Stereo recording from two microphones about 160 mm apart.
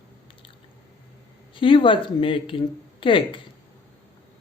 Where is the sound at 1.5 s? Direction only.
30° left (ahead or behind).